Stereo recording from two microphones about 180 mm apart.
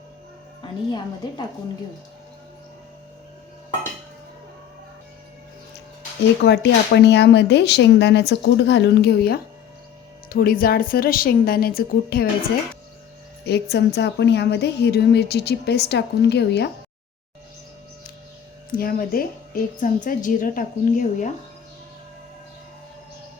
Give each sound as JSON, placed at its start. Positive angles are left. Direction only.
{"t": 0.6, "sound": "a woman's voice", "side_deg": 25}
{"t": 6.4, "sound": "a woman's voice", "side_deg": 70}
{"t": 13.4, "sound": "a woman's voice", "side_deg": 65}
{"t": 18.7, "sound": "a woman's voice", "side_deg": 50}